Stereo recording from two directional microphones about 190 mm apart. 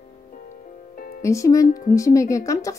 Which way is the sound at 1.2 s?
15° left (ahead or behind).